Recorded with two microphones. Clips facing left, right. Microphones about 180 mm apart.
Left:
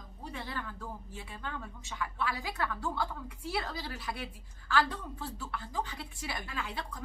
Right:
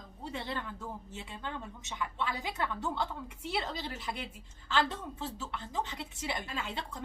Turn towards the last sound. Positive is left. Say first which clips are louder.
# right 1 dB
turn(degrees=-25)  # may be behind; listen again after turning